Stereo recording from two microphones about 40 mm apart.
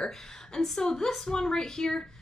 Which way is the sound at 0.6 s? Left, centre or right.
Centre.